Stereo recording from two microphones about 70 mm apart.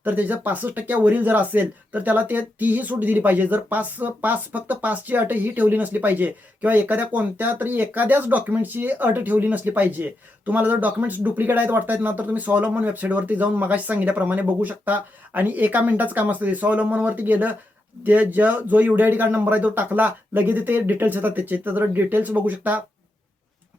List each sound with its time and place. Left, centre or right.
0.0 s speech: right